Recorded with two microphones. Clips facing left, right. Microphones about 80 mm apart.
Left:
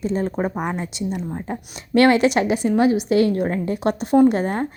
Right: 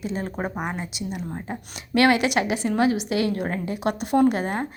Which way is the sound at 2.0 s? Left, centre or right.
Left.